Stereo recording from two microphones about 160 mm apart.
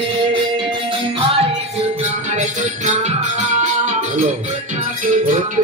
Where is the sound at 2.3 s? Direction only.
50° right (ahead or behind).